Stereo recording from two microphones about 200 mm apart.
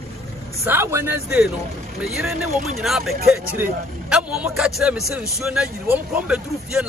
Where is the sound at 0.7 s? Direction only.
10° right (ahead or behind).